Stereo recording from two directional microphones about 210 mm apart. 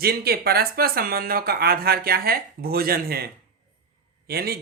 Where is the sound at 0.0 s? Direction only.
45° right (ahead or behind).